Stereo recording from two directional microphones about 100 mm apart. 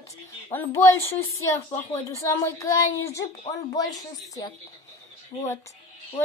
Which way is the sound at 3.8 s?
40° left (ahead or behind).